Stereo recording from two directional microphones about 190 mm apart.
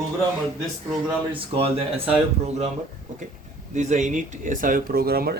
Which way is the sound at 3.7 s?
40° right (ahead or behind).